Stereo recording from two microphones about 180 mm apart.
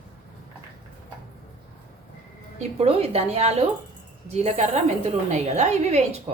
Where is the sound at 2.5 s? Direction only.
35° right (ahead or behind).